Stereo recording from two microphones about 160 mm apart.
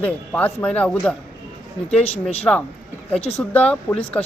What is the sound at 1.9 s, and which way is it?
Speech, 40° left (ahead or behind).